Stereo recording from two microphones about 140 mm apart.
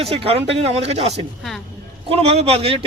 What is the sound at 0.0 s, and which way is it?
Speech, 45° right (ahead or behind).